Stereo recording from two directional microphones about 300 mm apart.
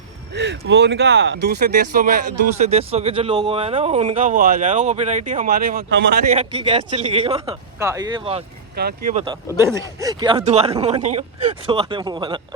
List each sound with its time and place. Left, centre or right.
0.3 s speech: right
6.2 s speech: centre
8.7 s speech: right
9.1 s speech: centre